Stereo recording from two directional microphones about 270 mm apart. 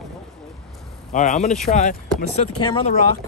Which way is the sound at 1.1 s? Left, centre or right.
Left.